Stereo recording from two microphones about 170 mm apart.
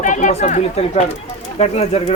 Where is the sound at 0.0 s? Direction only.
45° left (ahead or behind).